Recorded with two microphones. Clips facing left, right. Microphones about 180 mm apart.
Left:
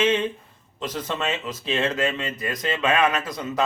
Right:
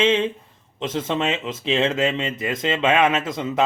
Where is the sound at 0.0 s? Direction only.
25° right (ahead or behind).